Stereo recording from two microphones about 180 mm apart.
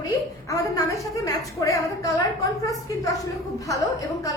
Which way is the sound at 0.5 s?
15° left (ahead or behind).